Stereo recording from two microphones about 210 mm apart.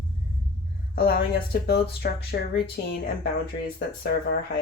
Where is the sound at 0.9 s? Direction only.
45° left (ahead or behind).